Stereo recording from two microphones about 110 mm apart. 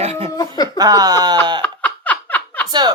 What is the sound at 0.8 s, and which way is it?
Speech, 35° right (ahead or behind).